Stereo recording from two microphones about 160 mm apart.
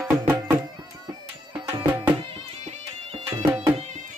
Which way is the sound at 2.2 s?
35° right (ahead or behind).